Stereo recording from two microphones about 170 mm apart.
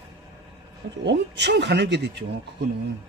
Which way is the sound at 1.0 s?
85° right.